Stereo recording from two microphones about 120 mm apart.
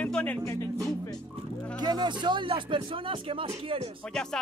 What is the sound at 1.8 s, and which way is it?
Speech, 35° right (ahead or behind).